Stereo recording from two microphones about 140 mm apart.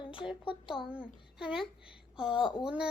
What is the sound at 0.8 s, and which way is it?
A child's voice, 5° right (ahead or behind).